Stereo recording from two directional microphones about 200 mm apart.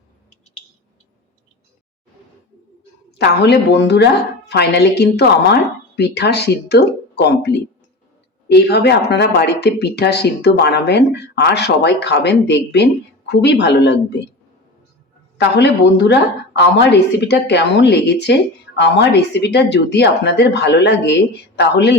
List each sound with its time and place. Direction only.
3.2 s speech: 55° left (ahead or behind)
15.4 s speech: 60° left (ahead or behind)